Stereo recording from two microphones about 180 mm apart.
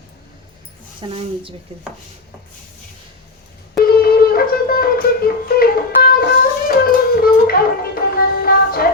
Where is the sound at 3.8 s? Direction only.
55° left (ahead or behind).